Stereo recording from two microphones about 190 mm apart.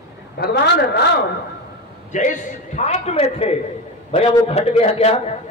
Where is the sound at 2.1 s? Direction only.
40° left (ahead or behind).